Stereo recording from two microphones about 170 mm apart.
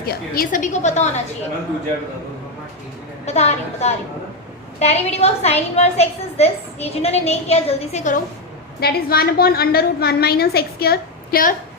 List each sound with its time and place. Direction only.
0.0 s a woman's voice: 60° left (ahead or behind); by 1.2 s 40° left (ahead or behind)
3.2 s a woman's voice: 40° left (ahead or behind)
8.8 s a woman's voice: 65° left (ahead or behind)